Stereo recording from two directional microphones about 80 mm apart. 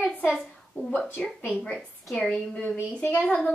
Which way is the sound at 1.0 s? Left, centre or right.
Centre.